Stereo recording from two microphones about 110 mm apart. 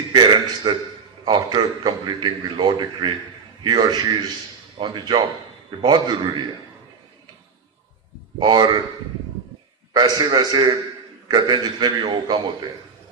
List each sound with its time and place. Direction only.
0.1 s a sound: 40° right (ahead or behind)
1.2 s a man's voice: 40° right (ahead or behind)
8.4 s a man's voice: 40° right (ahead or behind)
9.9 s a man's voice: 40° right (ahead or behind)